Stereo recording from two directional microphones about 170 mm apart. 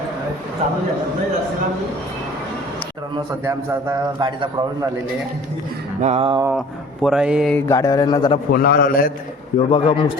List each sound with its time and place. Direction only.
3.4 s a man's voice: 15° right (ahead or behind)
4.2 s a man's voice: 25° right (ahead or behind)
6.0 s speech: 35° right (ahead or behind)
7.0 s speech: 5° right (ahead or behind)
7.5 s a man's voice: 20° left (ahead or behind)
8.5 s a man's voice: 65° left (ahead or behind)
9.6 s a man's voice: 35° left (ahead or behind)